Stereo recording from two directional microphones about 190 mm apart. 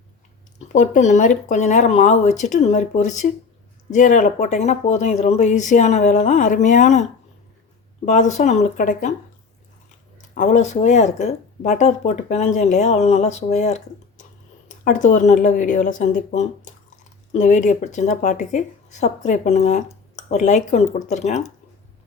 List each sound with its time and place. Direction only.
0.7 s speech: 40° left (ahead or behind)
8.0 s speech: 40° left (ahead or behind)
10.2 s speech: 40° left (ahead or behind)